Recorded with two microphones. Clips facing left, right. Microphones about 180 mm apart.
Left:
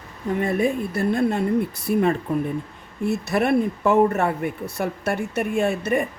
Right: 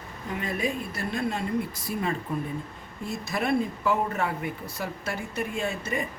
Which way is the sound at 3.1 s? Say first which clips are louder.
Left 7 dB; 65° left (ahead or behind).